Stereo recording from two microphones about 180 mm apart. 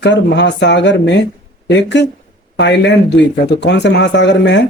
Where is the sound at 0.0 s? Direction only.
75° left (ahead or behind).